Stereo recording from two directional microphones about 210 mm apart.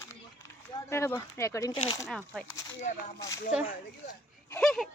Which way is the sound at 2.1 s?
Centre (ahead or behind).